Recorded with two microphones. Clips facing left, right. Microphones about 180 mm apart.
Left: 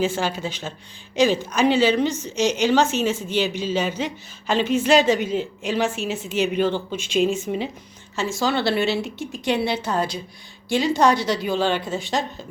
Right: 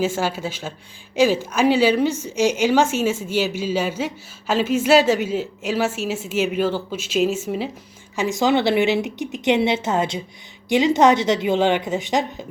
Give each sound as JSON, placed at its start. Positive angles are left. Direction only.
{"t": 0.0, "sound": "a woman's voice", "side_deg": -10}
{"t": 8.1, "sound": "a woman's voice", "side_deg": -15}